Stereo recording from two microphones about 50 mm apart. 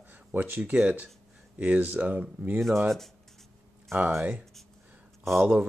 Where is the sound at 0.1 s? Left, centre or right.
Right.